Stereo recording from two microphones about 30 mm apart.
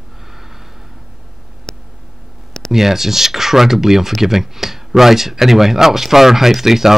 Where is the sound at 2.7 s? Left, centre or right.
Centre.